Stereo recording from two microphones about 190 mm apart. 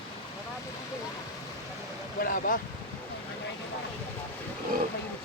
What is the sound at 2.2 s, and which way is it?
Boat, 50° left (ahead or behind).